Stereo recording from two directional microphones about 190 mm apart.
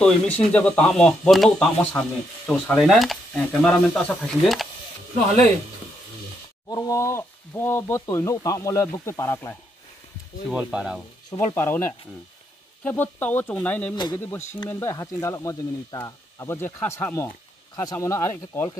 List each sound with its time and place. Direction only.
0.0 s speech: 5° left (ahead or behind)
6.7 s speech: 15° left (ahead or behind)
10.5 s speech: 5° right (ahead or behind)
11.2 s speech: 15° left (ahead or behind)
13.9 s speech: 20° left (ahead or behind)
14.2 s speech: 10° left (ahead or behind)